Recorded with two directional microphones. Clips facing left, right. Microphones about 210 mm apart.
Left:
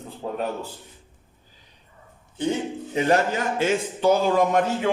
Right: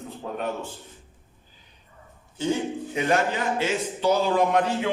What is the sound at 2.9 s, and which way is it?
Speech, 35° left (ahead or behind).